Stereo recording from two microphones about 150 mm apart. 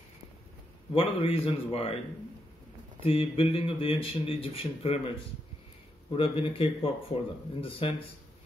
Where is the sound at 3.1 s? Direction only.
40° left (ahead or behind).